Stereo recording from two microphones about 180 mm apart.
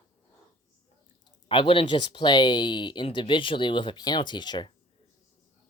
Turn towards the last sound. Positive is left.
turn(degrees=25)  # may be behind; listen again after turning